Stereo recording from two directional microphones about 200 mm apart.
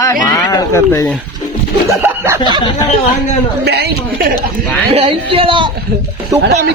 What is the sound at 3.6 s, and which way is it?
Speech, 55° right (ahead or behind).